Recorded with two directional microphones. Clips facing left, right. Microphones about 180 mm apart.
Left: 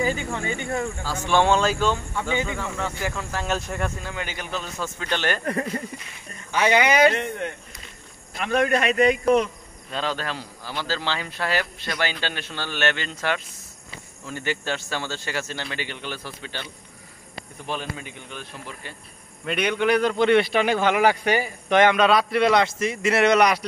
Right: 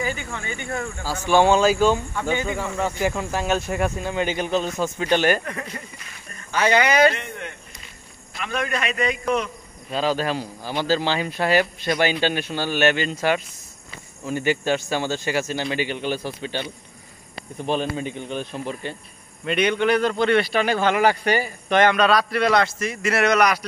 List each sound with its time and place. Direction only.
0.3 s speech: 20° left (ahead or behind)
1.0 s speech: 5° right (ahead or behind)
3.4 s speech: 5° right (ahead or behind)
4.1 s a man's voice: 20° right (ahead or behind)
5.4 s a man's voice: 35° left (ahead or behind)
6.5 s a man's voice: 15° left (ahead or behind)
8.4 s a man's voice: 45° left (ahead or behind)
9.8 s speech: 10° right (ahead or behind)
17.6 s a man's voice: 25° right (ahead or behind)
19.4 s a man's voice: 5° left (ahead or behind); by 23.6 s 25° left (ahead or behind)